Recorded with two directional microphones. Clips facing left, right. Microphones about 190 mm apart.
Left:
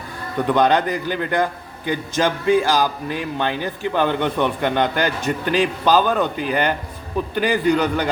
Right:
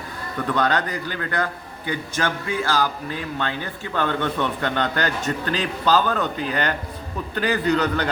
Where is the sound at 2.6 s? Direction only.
15° left (ahead or behind).